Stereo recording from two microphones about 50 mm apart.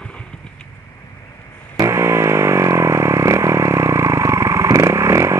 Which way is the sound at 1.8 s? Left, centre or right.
Right.